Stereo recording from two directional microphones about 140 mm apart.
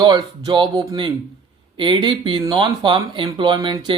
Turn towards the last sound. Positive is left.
turn(degrees=-35)  # may be behind; listen again after turning